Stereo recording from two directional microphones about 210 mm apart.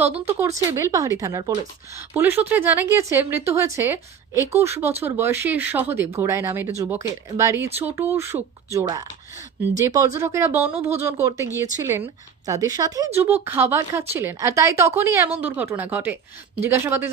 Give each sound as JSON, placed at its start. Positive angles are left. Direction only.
{"t": 0.0, "sound": "a woman's voice", "side_deg": -10}